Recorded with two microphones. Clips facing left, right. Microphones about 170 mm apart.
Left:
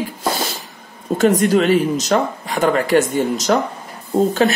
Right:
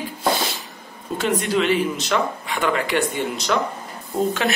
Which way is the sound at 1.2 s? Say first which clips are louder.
Left 7 dB; 45° left (ahead or behind).